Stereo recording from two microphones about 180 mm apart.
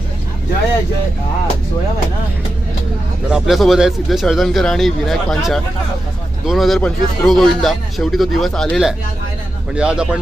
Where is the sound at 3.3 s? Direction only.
5° right (ahead or behind).